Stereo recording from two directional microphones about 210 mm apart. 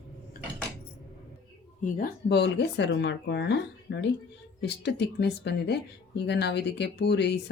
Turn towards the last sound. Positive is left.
turn(degrees=55)  # may be behind; listen again after turning